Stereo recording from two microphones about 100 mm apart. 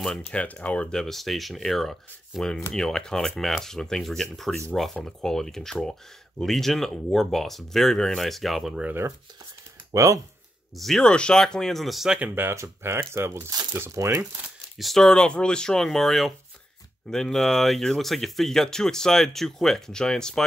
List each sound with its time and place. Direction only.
0.3 s speech: 10° left (ahead or behind)
8.8 s speech: 25° right (ahead or behind)
9.8 s speech: 35° right (ahead or behind)
10.8 s speech: 5° left (ahead or behind)
12.2 s speech: 20° right (ahead or behind)
14.8 s speech: 5° left (ahead or behind)